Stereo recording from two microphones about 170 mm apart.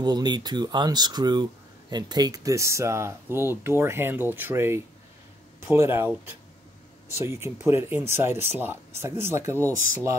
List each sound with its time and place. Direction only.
0.0 s speech: 25° right (ahead or behind)